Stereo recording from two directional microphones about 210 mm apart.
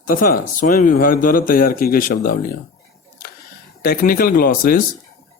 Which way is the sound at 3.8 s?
45° left (ahead or behind).